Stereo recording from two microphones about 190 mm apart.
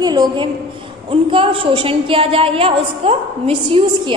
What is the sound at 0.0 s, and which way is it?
A woman's voice, 20° right (ahead or behind).